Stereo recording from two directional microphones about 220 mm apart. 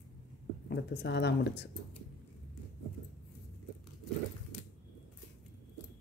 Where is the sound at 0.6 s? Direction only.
50° left (ahead or behind).